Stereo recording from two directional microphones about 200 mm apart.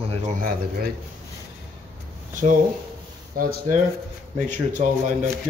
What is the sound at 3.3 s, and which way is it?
Speech, 45° right (ahead or behind).